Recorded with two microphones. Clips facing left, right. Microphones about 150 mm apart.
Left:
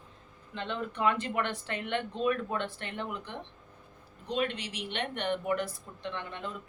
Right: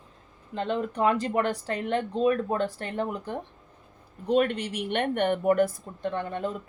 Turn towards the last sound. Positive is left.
turn(degrees=-45)  # may be behind; listen again after turning